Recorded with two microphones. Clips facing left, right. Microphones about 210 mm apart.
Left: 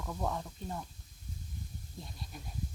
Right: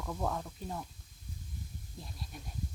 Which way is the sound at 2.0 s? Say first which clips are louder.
Even; centre (ahead or behind).